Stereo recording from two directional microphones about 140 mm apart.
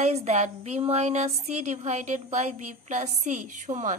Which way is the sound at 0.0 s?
55° right (ahead or behind).